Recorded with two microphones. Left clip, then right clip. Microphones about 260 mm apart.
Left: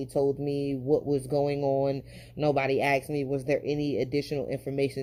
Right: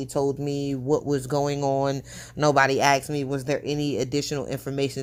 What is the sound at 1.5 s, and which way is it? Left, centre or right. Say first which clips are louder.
Speech: right 2 dB; right.